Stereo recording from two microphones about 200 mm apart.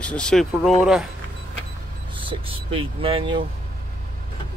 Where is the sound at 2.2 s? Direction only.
25° right (ahead or behind).